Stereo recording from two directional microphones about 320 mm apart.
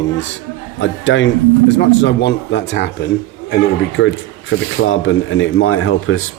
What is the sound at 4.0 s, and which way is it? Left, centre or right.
A man's voice, left.